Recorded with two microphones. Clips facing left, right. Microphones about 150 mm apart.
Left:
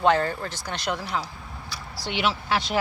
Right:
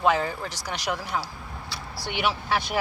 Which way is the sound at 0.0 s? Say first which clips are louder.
Left 2 dB; 10° right (ahead or behind).